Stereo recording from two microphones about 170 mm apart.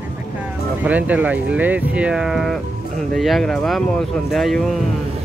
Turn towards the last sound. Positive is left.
turn(degrees=0)  # may be behind; listen again after turning